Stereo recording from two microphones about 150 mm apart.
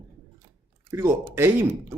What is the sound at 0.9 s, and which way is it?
Speech, 15° right (ahead or behind).